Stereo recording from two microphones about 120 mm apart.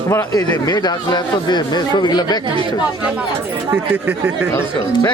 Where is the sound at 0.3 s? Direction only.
35° left (ahead or behind).